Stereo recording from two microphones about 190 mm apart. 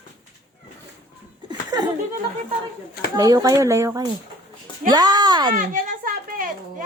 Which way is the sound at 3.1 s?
20° right (ahead or behind).